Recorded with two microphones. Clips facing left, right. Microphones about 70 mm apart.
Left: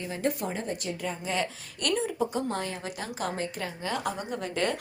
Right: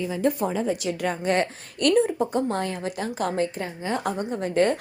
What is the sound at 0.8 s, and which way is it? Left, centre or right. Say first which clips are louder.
Speech: right 8 dB; right.